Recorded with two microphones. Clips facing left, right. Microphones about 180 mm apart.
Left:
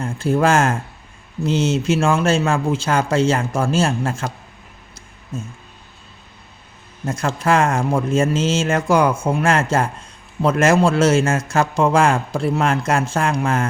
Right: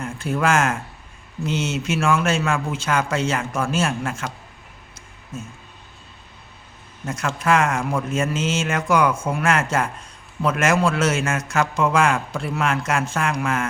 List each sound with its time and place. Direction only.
0.0 s a man's voice: 30° left (ahead or behind)
7.0 s a man's voice: 30° left (ahead or behind)